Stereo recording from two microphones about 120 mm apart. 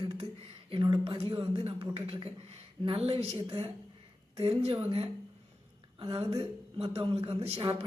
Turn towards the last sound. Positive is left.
turn(degrees=-50)  # may be behind; listen again after turning